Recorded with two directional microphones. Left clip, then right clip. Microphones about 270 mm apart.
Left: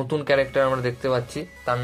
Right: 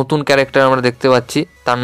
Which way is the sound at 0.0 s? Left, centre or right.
Right.